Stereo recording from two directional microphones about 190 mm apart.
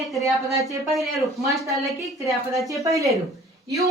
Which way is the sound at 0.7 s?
15° right (ahead or behind).